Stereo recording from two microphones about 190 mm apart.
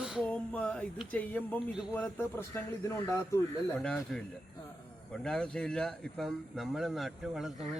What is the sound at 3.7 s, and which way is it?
Speech, centre (ahead or behind).